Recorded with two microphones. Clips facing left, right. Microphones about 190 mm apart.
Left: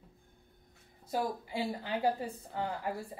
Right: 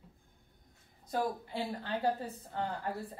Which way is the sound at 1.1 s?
10° left (ahead or behind).